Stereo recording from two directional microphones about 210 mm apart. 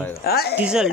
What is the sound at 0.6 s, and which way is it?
Speech, 5° right (ahead or behind).